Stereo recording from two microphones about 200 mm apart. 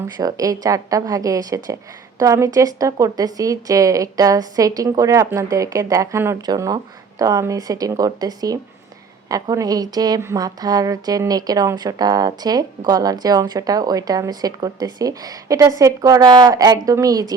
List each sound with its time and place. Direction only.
0.2 s a woman's voice: 20° right (ahead or behind)